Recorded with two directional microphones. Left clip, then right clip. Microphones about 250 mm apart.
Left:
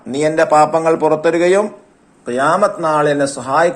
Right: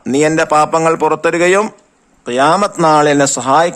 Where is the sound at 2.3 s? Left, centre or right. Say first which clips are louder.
Right 2 dB; right.